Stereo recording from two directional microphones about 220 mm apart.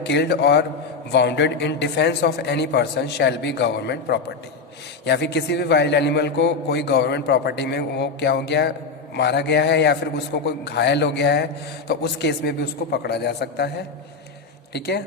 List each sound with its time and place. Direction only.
0.0 s a man's voice: 50° left (ahead or behind)